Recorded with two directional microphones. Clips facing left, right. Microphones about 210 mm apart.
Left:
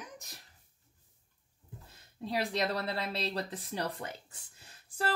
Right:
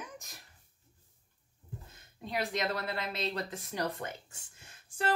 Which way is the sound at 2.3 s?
35° left (ahead or behind).